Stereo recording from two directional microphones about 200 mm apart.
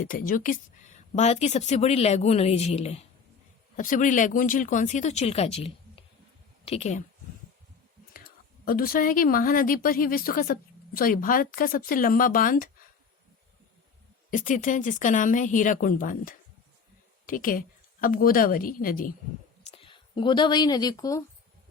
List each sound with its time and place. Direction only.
0.0 s a woman's voice: 45° left (ahead or behind)
8.1 s a woman's voice: 45° left (ahead or behind)
14.3 s a woman's voice: 40° left (ahead or behind)
19.7 s speech: 25° left (ahead or behind)